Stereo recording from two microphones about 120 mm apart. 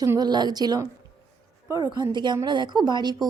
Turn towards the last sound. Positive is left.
turn(degrees=-35)  # may be behind; listen again after turning